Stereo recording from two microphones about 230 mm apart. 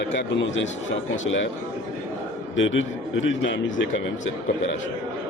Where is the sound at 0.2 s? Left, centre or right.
Left.